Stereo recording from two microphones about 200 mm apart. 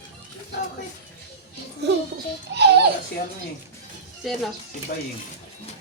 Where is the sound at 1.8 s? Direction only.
55° right (ahead or behind).